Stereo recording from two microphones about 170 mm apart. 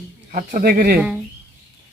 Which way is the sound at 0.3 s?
50° right (ahead or behind).